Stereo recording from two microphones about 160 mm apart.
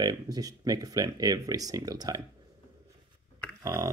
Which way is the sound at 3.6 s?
20° right (ahead or behind).